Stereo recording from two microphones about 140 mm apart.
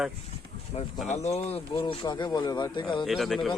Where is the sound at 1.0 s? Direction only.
55° left (ahead or behind); by 2.8 s 30° left (ahead or behind).